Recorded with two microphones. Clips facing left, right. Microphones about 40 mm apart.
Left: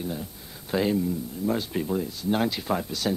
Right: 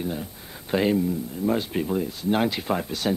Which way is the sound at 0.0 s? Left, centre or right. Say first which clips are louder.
Right 3 dB; right.